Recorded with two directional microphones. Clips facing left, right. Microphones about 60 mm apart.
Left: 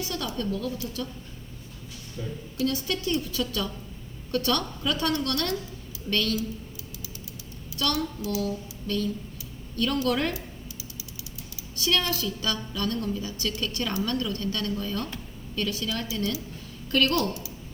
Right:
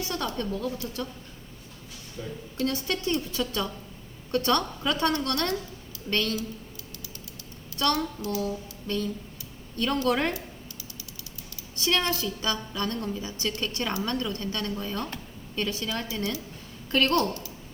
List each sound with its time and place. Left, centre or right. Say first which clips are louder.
0.0 s a sound: right 1 dB; right
0.3 s a woman's voice: left 1 dB; right
2.6 s a woman's voice: left 1 dB; right
7.8 s a woman's voice: right 2 dB; right
8.3 s a sound: left 1 dB; right
9.7 s a woman's voice: even; right
11.7 s a woman's voice: even; right